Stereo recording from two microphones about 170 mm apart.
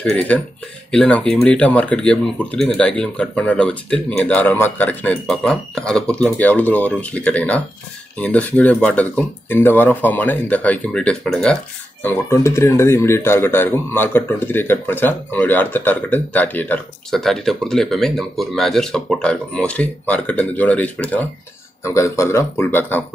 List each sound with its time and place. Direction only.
0.0 s speech: 10° left (ahead or behind)
12.0 s speech: 15° left (ahead or behind)